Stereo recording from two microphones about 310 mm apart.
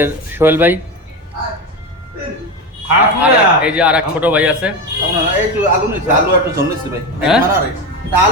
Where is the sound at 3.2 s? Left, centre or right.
Centre.